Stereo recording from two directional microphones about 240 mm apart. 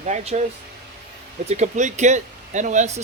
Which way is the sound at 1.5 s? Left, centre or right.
Right.